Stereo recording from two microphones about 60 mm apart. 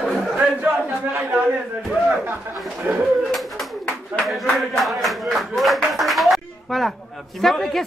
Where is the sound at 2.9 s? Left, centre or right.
Right.